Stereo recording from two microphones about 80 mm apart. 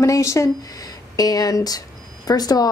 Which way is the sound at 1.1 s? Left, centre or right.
Left.